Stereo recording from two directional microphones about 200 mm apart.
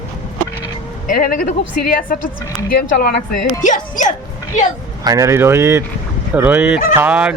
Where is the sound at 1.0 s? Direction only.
45° left (ahead or behind).